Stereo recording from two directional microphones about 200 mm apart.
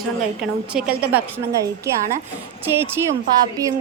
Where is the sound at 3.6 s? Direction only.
15° right (ahead or behind).